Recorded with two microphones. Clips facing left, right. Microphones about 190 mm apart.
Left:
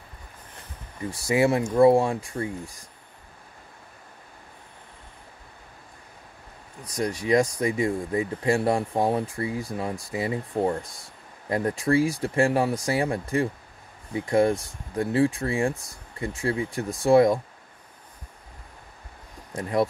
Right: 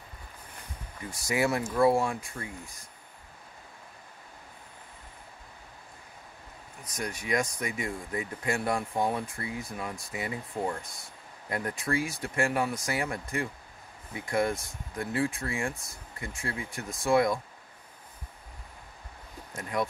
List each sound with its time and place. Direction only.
1.1 s speech: 30° left (ahead or behind)
6.9 s speech: 35° left (ahead or behind)
19.5 s speech: 35° left (ahead or behind)